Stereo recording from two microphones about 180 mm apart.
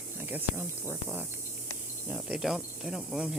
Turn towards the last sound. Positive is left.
turn(degrees=-5)  # may be behind; listen again after turning